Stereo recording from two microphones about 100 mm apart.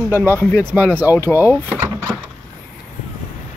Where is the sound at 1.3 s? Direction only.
20° right (ahead or behind).